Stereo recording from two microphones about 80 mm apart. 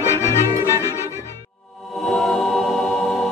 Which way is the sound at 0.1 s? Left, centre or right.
Left.